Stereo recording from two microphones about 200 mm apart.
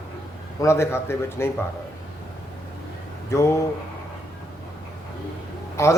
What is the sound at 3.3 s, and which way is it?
Speech, 15° left (ahead or behind).